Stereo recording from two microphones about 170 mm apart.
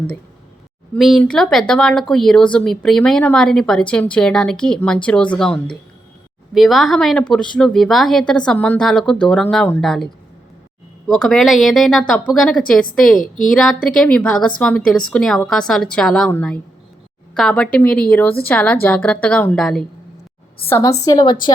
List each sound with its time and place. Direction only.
0.9 s speech: centre (ahead or behind)
11.1 s a woman's voice: centre (ahead or behind)
20.7 s a woman's voice: 15° left (ahead or behind)